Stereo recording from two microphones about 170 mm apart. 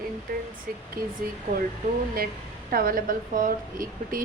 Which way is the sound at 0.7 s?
60° right (ahead or behind).